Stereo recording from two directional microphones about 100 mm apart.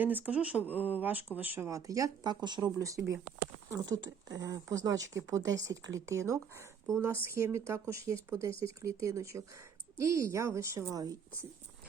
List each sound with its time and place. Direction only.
0.0 s speech: 15° right (ahead or behind)
1.6 s speech: 35° right (ahead or behind)